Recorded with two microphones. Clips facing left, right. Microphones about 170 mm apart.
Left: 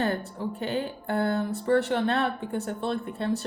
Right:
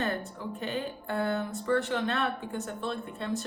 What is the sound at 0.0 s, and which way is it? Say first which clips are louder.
Speech: left 4 dB; 35° left (ahead or behind).